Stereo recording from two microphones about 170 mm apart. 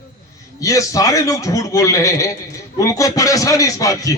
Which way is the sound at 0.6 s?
20° left (ahead or behind).